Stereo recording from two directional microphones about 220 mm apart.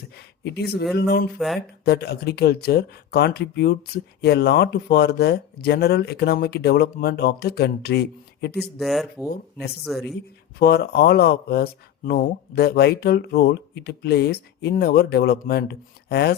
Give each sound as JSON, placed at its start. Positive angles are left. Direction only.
{"t": 0.2, "sound": "a sound", "side_deg": 50}
{"t": 0.9, "sound": "speech", "side_deg": 45}
{"t": 8.8, "sound": "speech", "side_deg": 0}
{"t": 9.3, "sound": "speech", "side_deg": 45}
{"t": 9.8, "sound": "speech", "side_deg": 0}
{"t": 10.6, "sound": "speech", "side_deg": 45}